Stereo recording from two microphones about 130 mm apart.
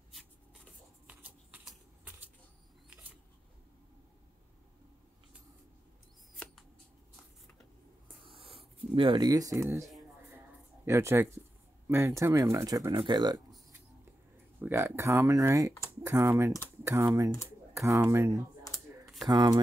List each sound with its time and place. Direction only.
1.0 s a sound: 10° right (ahead or behind)
8.4 s speech: 45° right (ahead or behind); by 9.8 s 25° right (ahead or behind)
10.9 s speech: 20° right (ahead or behind)
14.6 s speech: 20° right (ahead or behind)
19.2 s speech: 35° right (ahead or behind)